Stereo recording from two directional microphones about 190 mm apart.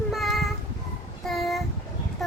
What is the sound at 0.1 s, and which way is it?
Child singing, centre (ahead or behind).